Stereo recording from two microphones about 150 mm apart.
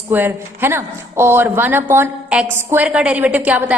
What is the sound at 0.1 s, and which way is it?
A woman's voice, 15° right (ahead or behind).